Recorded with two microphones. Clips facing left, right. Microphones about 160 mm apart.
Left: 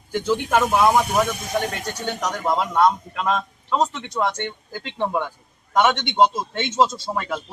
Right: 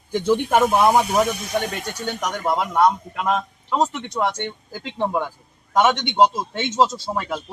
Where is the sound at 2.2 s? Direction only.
10° right (ahead or behind).